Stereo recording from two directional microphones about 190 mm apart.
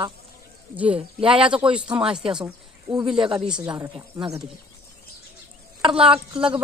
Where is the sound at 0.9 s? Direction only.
30° right (ahead or behind).